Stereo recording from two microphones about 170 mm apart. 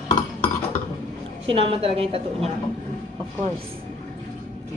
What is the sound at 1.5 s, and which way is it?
A woman's voice, 35° right (ahead or behind).